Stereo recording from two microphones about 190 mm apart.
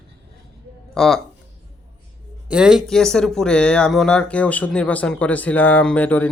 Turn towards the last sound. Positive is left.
turn(degrees=10)  # may be behind; listen again after turning